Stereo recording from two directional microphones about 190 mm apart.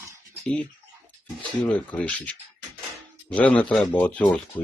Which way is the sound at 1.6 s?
5° left (ahead or behind).